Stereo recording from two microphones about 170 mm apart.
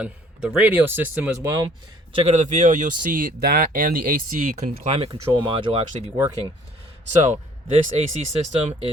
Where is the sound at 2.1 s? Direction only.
40° right (ahead or behind).